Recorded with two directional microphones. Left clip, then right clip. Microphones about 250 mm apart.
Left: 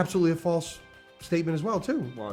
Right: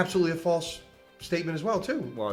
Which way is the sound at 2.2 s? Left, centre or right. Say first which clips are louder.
Right 5 dB; centre.